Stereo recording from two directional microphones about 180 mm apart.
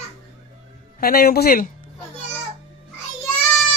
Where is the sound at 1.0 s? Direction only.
55° left (ahead or behind).